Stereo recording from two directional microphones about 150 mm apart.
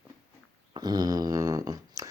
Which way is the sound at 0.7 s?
25° right (ahead or behind).